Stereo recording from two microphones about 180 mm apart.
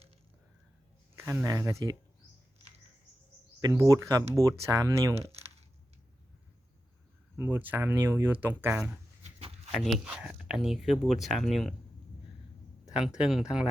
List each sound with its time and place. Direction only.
1.1 s speech: 15° right (ahead or behind)
3.6 s speech: 15° right (ahead or behind)
5.1 s speech: 35° right (ahead or behind)
7.3 s speech: 10° right (ahead or behind)
12.8 s speech: 5° right (ahead or behind)